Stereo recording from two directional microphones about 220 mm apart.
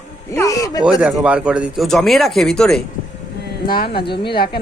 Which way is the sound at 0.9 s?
5° right (ahead or behind).